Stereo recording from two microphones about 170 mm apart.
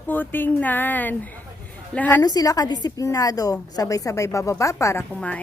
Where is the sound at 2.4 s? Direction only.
20° left (ahead or behind).